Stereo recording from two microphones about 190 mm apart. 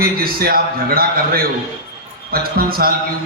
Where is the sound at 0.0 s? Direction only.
50° right (ahead or behind).